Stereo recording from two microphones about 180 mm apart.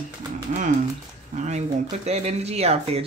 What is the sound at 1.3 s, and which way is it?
Speech, 40° right (ahead or behind).